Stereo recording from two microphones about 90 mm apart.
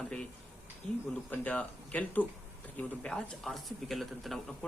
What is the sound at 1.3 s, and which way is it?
Speech, 15° left (ahead or behind).